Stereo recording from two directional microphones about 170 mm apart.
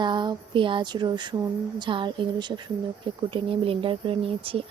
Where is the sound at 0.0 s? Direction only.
25° right (ahead or behind).